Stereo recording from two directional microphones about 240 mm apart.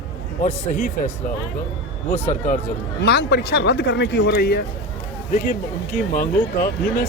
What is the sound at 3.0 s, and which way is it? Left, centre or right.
Speech, left.